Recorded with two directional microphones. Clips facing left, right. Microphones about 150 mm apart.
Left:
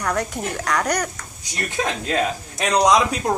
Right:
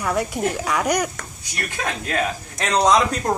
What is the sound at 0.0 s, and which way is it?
Speech, 5° right (ahead or behind).